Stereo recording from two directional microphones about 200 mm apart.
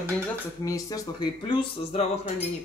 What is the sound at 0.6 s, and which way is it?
Speech, 15° left (ahead or behind).